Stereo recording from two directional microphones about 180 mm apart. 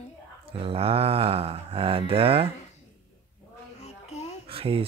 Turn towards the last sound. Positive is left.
turn(degrees=-30)  # may be behind; listen again after turning